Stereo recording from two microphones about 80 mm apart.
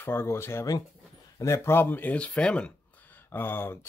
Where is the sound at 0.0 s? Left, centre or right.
Left.